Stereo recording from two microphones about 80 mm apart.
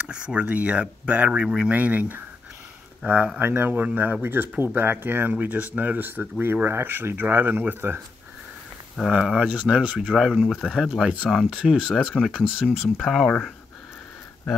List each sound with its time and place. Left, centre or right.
0.1 s speech: centre
9.1 s speech: centre